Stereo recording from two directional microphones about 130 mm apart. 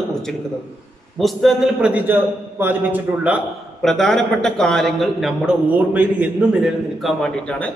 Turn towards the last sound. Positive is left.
turn(degrees=5)  # may be behind; listen again after turning